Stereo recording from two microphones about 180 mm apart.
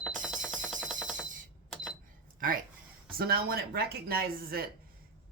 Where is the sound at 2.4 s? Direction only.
50° right (ahead or behind).